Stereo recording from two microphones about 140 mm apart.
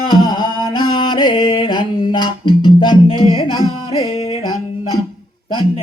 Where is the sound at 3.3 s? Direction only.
35° left (ahead or behind).